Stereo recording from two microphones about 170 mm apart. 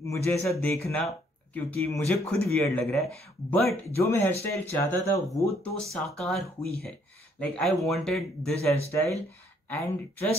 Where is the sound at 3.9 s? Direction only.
15° left (ahead or behind).